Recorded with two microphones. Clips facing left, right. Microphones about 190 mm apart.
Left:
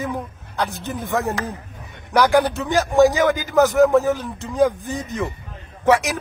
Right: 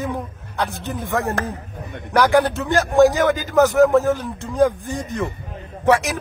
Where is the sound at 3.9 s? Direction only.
15° left (ahead or behind).